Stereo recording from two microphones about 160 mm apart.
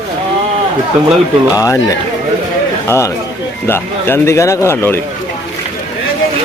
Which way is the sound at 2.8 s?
15° left (ahead or behind).